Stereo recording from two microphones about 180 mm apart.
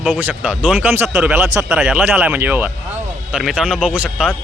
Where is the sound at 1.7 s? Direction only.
Centre (ahead or behind).